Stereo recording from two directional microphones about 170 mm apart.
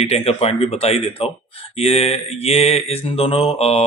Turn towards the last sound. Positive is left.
turn(degrees=35)  # may be behind; listen again after turning